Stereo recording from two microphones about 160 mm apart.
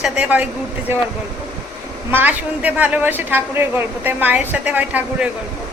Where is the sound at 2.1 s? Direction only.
10° right (ahead or behind).